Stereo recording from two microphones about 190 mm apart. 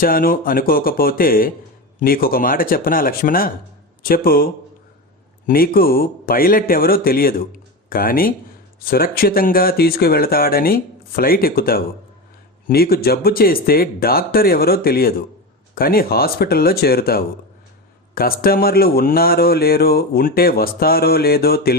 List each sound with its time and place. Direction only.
0.0 s speech: 50° left (ahead or behind)
5.5 s speech: 50° left (ahead or behind)